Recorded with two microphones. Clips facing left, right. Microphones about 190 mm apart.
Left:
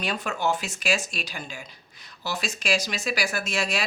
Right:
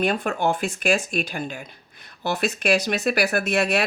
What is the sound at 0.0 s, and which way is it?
Speech, 55° right (ahead or behind).